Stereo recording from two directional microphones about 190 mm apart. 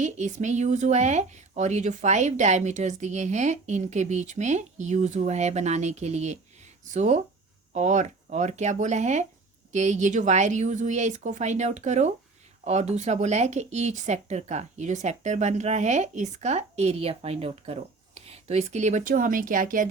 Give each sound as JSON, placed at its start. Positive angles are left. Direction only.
{"t": 0.0, "sound": "speech", "side_deg": -40}